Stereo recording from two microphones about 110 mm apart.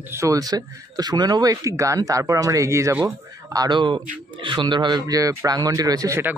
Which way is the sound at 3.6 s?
45° right (ahead or behind).